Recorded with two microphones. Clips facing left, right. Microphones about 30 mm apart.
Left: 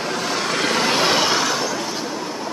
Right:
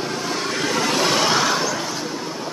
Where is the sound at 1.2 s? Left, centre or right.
Centre.